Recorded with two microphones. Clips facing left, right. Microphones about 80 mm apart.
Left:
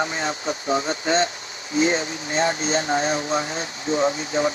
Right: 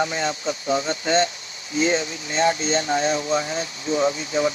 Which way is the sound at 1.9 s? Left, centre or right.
Left.